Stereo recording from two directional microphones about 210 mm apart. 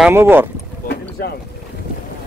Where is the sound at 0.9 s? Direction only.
50° left (ahead or behind).